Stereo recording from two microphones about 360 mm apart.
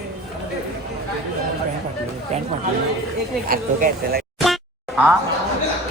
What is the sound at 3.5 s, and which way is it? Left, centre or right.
Speech, right.